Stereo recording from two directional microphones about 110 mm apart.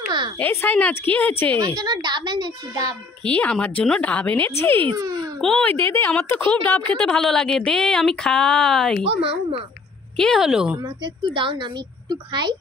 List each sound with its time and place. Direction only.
0.4 s speech: 20° left (ahead or behind)
1.6 s a child's voice: 40° right (ahead or behind)
3.3 s speech: 10° left (ahead or behind)
4.9 s a child's voice: 35° right (ahead or behind)
5.4 s speech: 5° left (ahead or behind)
5.7 s a woman's voice: 20° left (ahead or behind); by 9.0 s 5° left (ahead or behind)
9.0 s speech: 60° right (ahead or behind)
10.1 s speech: 5° left (ahead or behind)
11.2 s a woman's voice: 50° right (ahead or behind)